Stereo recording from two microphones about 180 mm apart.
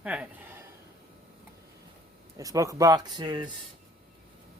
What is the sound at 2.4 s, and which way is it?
Speech, 20° right (ahead or behind).